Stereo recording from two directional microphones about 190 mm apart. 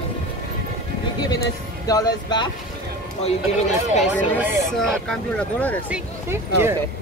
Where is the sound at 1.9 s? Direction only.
20° left (ahead or behind).